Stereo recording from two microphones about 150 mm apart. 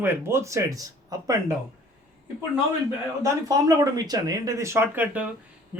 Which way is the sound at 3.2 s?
25° right (ahead or behind).